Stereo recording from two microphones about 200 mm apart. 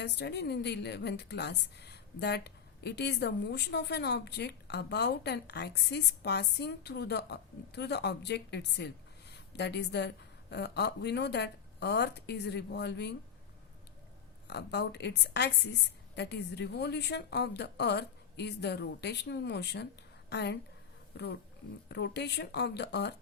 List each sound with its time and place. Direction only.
0.0 s a woman's voice: 55° left (ahead or behind)
14.4 s a woman's voice: 60° left (ahead or behind)
21.8 s a woman's voice: 60° left (ahead or behind)